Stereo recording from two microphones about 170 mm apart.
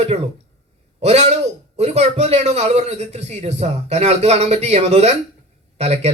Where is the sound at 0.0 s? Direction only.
40° right (ahead or behind).